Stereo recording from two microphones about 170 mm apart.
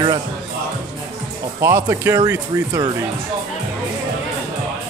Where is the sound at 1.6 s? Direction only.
15° right (ahead or behind).